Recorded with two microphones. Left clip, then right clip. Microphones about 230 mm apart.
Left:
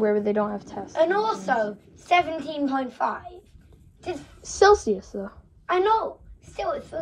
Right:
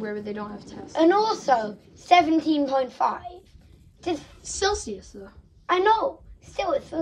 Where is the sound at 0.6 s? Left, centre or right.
Left.